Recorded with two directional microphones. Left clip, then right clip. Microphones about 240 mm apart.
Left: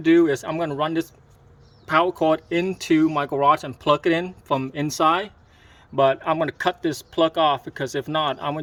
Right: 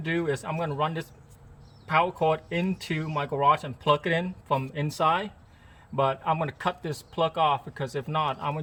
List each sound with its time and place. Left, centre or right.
0.0 s speech: left